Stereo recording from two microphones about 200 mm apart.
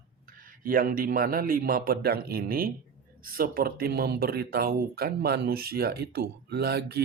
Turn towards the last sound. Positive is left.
turn(degrees=-55)  # may be behind; listen again after turning